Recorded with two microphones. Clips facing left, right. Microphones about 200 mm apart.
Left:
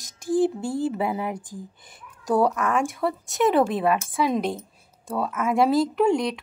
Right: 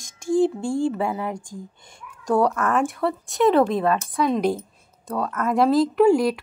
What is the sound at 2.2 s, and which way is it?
A woman's voice, 5° left (ahead or behind).